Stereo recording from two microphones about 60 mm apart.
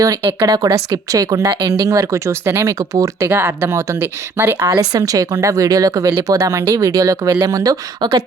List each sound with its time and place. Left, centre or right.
0.4 s a woman's voice: right
2.1 s speech: right
2.9 s speech: right
3.2 s speech: right
4.8 s speech: right
7.4 s a woman's voice: right